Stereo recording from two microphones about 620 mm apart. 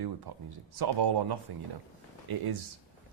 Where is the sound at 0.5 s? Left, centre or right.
Right.